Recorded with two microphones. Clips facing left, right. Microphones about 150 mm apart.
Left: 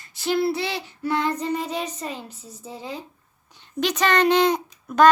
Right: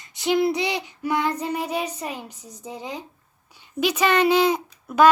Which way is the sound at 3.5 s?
10° right (ahead or behind).